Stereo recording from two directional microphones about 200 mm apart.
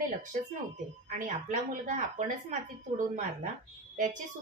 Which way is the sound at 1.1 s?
40° right (ahead or behind).